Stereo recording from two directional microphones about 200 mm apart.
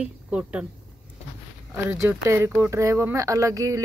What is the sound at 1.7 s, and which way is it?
Speech, 15° right (ahead or behind).